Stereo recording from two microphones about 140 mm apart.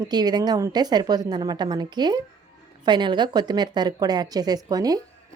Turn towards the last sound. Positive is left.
turn(degrees=-25)  # may be behind; listen again after turning